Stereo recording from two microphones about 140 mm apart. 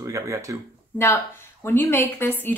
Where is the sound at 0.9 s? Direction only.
15° left (ahead or behind).